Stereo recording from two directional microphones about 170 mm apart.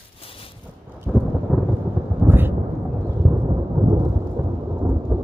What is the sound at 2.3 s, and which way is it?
Thunder, 10° right (ahead or behind).